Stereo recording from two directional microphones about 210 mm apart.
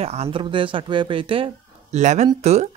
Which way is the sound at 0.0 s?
30° right (ahead or behind).